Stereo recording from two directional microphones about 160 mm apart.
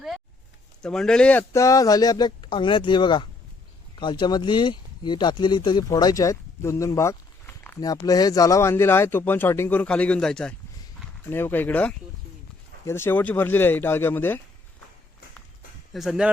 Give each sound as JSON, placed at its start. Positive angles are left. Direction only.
{"t": 0.8, "sound": "speech", "side_deg": 5}
{"t": 15.9, "sound": "speech", "side_deg": 0}